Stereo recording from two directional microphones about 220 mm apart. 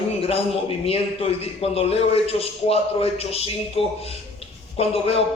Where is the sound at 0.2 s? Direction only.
25° left (ahead or behind).